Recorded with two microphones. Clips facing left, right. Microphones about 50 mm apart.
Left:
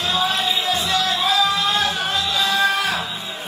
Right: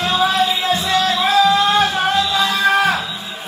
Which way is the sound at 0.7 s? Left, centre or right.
Right.